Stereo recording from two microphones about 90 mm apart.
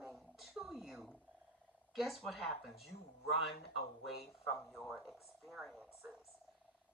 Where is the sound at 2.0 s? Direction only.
Centre (ahead or behind).